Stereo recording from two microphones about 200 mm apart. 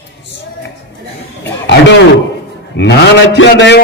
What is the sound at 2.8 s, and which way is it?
A man's voice, 60° left (ahead or behind).